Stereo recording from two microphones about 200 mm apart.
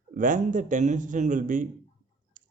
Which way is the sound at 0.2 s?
40° right (ahead or behind).